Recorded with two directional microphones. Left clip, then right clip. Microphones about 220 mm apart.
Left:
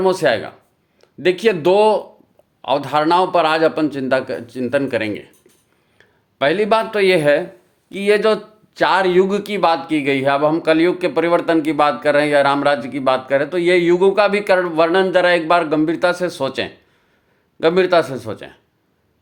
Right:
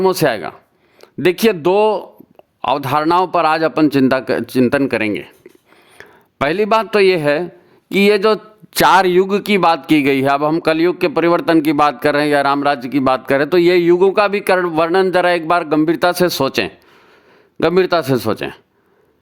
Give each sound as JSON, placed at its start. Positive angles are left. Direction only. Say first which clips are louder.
{"t": 0.0, "sound": "a man's voice", "louder": "right 1 dB", "side_deg": -35}